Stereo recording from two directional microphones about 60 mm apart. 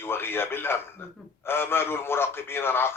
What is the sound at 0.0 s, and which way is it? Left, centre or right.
A man's voice, left.